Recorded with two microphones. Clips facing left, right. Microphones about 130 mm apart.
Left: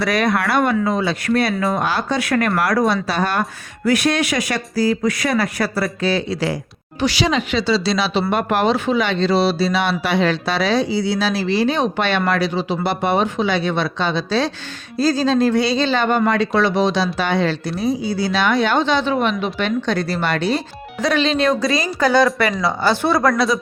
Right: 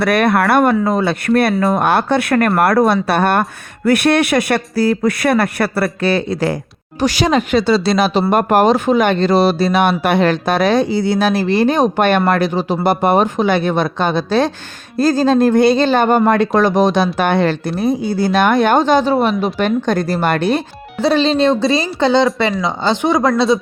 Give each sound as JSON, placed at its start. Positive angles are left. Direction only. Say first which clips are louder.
{"t": 0.0, "sound": "speech", "louder": "right 5 dB", "side_deg": -60}
{"t": 21.0, "sound": "speech", "louder": "right 4 dB", "side_deg": -30}